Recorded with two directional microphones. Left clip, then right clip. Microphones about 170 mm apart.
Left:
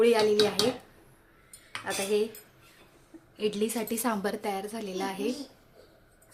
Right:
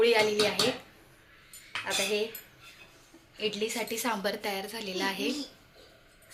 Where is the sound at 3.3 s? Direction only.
65° left (ahead or behind); by 5.3 s 45° left (ahead or behind).